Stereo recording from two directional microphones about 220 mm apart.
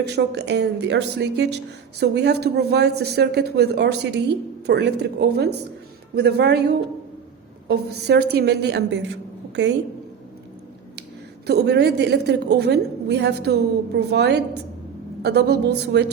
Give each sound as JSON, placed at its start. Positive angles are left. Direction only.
{"t": 0.0, "sound": "a woman's voice", "side_deg": -50}
{"t": 7.7, "sound": "a woman's voice", "side_deg": -50}
{"t": 11.4, "sound": "a woman's voice", "side_deg": -50}